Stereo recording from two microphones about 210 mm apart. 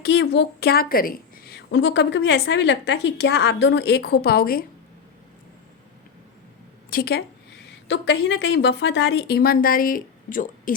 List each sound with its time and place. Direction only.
0.0 s a woman's voice: 55° left (ahead or behind)
6.9 s a woman's voice: 50° left (ahead or behind)